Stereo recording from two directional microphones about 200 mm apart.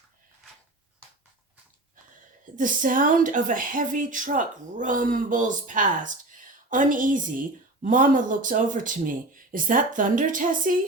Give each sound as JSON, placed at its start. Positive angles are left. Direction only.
{"t": 2.6, "sound": "a woman's voice", "side_deg": -40}